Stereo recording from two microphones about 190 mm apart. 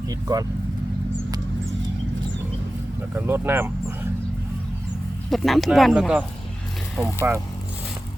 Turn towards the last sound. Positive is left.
turn(degrees=-10)  # may be behind; listen again after turning